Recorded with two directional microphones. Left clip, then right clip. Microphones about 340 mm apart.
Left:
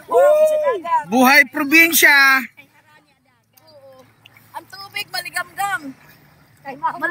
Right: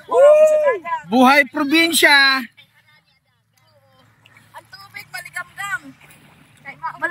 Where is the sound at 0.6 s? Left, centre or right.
Centre.